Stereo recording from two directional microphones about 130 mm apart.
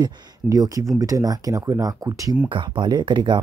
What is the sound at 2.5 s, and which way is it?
Speech, 40° right (ahead or behind).